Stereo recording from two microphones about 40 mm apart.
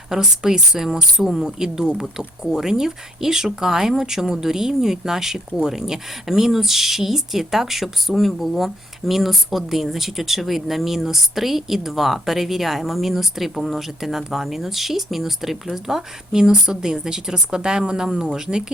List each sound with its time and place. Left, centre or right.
0.1 s speech: centre